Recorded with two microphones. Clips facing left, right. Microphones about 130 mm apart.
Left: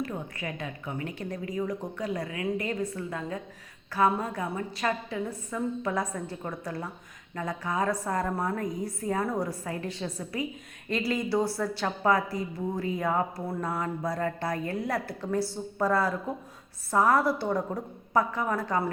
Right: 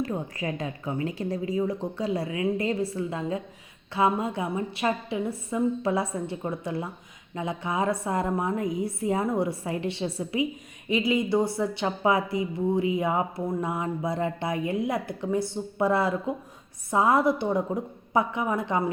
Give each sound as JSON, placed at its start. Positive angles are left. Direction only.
{"t": 0.0, "sound": "a woman's voice", "side_deg": -30}